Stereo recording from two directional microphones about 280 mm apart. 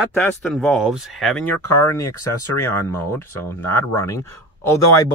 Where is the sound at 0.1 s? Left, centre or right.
Centre.